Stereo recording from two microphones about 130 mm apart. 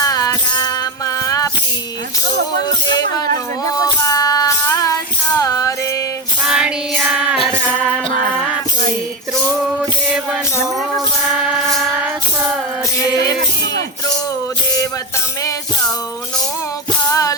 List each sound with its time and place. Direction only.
0.0 s music: 30° left (ahead or behind)
4.0 s music: 30° left (ahead or behind)
6.4 s music: 5° right (ahead or behind)
10.9 s music: centre (ahead or behind)
17.1 s music: 25° left (ahead or behind)